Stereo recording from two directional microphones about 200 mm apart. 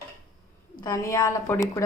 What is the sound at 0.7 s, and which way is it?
A woman's voice, 15° left (ahead or behind).